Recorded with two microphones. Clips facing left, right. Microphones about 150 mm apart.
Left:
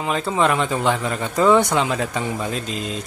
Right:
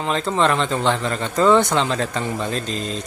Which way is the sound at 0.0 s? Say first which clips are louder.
Even; 5° left (ahead or behind).